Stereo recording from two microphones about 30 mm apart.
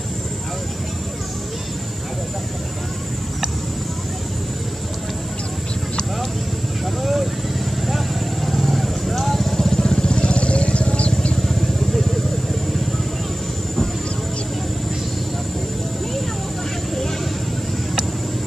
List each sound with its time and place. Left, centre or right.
7.0 s vehicle: centre
9.6 s vehicle: centre
10.0 s vehicle: left
11.3 s vehicle: centre